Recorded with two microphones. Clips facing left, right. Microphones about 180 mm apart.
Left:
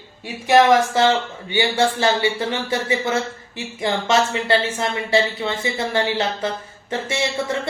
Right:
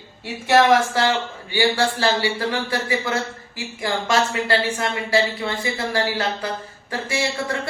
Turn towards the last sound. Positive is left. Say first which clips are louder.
# left 1 dB
turn(degrees=20)  # may be behind; listen again after turning